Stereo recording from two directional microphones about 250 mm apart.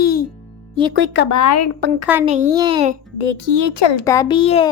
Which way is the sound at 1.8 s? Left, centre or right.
Right.